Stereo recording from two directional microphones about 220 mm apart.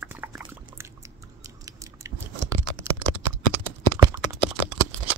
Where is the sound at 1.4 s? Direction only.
15° right (ahead or behind).